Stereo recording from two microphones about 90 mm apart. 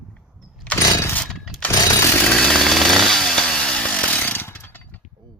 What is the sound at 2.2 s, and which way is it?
Chainsaw, 5° left (ahead or behind).